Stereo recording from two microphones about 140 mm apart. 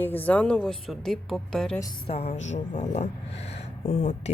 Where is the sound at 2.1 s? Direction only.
45° left (ahead or behind).